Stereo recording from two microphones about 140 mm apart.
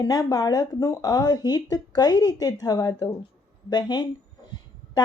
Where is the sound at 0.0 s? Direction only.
30° left (ahead or behind).